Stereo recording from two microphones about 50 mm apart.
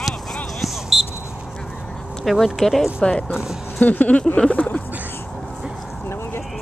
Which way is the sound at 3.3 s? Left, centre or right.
Centre.